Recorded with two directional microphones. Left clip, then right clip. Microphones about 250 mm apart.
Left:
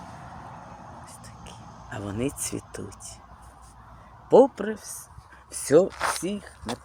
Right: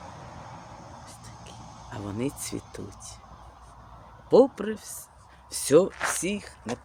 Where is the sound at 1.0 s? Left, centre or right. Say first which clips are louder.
Left 1 dB; centre.